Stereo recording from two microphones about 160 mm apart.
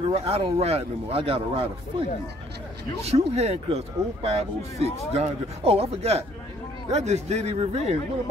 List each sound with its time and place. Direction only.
0.1 s a man's voice: 40° right (ahead or behind)